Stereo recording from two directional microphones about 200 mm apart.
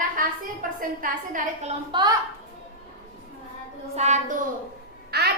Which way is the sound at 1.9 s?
20° right (ahead or behind).